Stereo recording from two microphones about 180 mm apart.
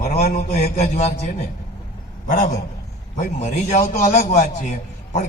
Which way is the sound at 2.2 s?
45° left (ahead or behind).